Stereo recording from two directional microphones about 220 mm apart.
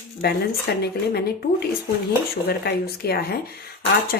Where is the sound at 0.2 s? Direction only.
45° left (ahead or behind).